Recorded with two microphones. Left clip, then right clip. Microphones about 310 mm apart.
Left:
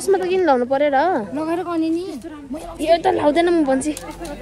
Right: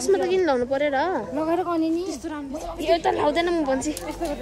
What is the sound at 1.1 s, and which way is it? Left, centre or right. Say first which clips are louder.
Speech: left 2 dB; left.